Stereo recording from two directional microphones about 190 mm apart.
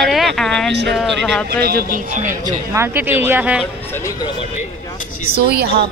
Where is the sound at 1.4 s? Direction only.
55° right (ahead or behind).